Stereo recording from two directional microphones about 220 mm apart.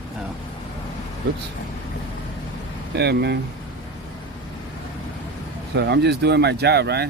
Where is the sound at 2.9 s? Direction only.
50° right (ahead or behind).